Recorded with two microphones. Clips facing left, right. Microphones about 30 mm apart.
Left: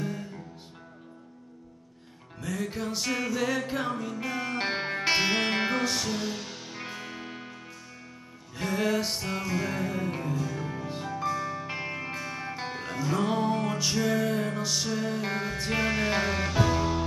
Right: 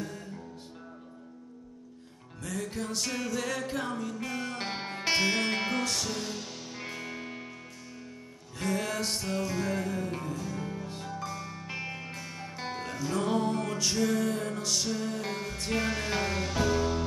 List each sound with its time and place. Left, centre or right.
2.6 s music: centre
8.5 s music: centre